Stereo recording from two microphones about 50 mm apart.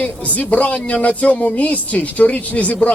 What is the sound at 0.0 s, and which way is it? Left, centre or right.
Speech, left.